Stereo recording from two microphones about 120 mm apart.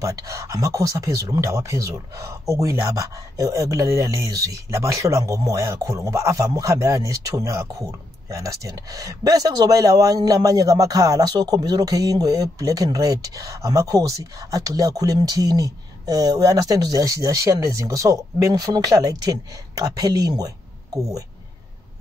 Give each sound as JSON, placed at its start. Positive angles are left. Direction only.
{"t": 0.0, "sound": "speech", "side_deg": -25}